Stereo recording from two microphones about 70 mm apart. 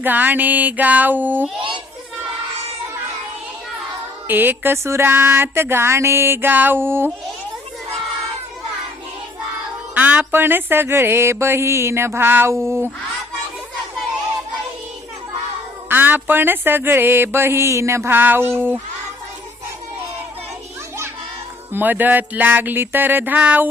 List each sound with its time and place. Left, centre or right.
0.0 s music: right
4.3 s music: right
4.8 s mantra: right
9.9 s speech: right
10.3 s mantra: right
15.9 s mantra: right
21.7 s music: right